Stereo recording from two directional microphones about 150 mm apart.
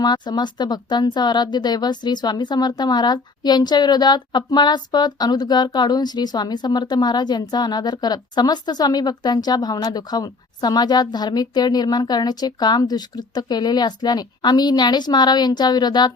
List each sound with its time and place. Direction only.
0.0 s speech: 30° left (ahead or behind)